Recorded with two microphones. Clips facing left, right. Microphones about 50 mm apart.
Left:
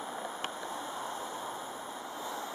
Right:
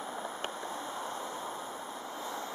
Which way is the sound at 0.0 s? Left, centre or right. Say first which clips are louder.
Even; centre.